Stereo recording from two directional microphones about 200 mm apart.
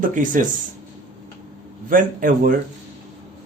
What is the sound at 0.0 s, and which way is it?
Speech, 40° right (ahead or behind).